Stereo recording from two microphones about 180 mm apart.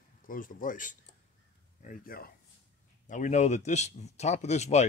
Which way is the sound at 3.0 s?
45° left (ahead or behind).